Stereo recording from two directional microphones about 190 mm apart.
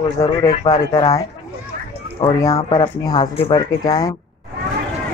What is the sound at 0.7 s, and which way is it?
Speech, 20° left (ahead or behind).